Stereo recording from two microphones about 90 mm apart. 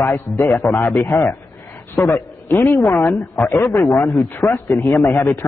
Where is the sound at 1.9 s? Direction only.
35° left (ahead or behind).